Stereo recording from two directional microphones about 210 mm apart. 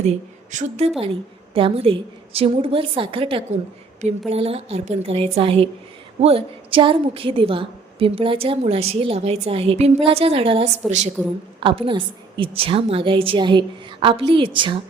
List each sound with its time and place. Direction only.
0.0 s a woman's voice: 35° right (ahead or behind)